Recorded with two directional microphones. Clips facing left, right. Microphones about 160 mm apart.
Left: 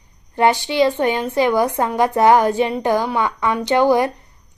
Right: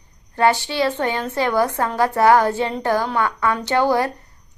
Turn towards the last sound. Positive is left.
turn(degrees=15)  # may be behind; listen again after turning